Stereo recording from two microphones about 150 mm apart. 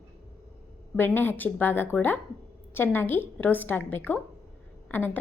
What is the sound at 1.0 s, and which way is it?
A woman's voice, 15° left (ahead or behind).